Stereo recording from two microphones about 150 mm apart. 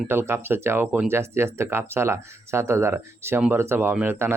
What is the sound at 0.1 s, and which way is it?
Speech, 15° right (ahead or behind).